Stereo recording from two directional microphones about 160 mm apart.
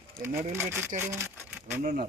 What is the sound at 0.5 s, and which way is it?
Speech, 15° right (ahead or behind).